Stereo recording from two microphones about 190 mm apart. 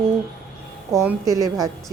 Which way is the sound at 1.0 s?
15° right (ahead or behind).